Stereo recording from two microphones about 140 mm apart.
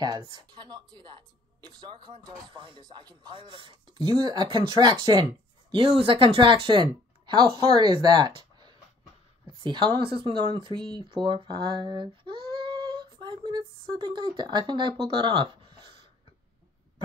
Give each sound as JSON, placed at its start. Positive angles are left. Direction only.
{"t": 0.5, "sound": "speech", "side_deg": -30}